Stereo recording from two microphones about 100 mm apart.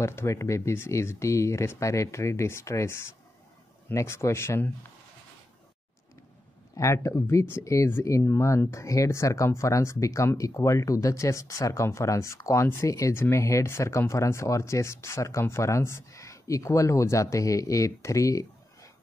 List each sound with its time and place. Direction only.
0.0 s speech: 25° left (ahead or behind)
6.8 s speech: 30° left (ahead or behind)